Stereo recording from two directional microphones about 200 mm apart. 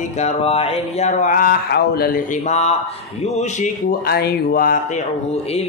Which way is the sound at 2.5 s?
35° left (ahead or behind).